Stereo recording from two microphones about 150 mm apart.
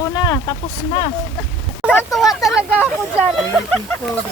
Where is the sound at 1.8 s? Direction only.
5° right (ahead or behind).